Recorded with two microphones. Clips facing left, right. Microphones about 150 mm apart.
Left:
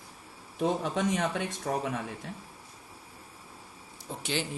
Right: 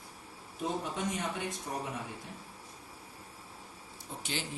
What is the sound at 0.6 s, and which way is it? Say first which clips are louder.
Speech: left 7 dB; 90° left.